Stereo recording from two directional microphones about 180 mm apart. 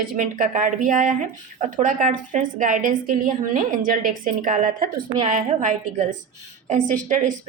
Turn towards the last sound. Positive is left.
turn(degrees=-45)  # may be behind; listen again after turning